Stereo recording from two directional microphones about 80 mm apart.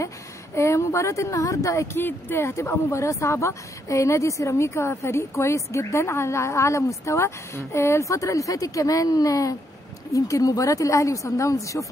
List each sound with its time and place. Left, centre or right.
0.6 s speech: left
2.0 s speech: left